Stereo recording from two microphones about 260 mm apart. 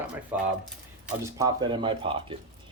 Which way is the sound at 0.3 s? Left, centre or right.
Centre.